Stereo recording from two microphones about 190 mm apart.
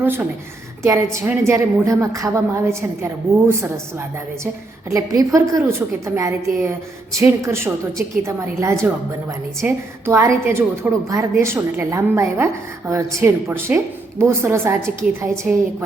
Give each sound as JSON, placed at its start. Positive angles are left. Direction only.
{"t": 0.0, "sound": "a woman's voice", "side_deg": -10}
{"t": 4.9, "sound": "a woman's voice", "side_deg": -15}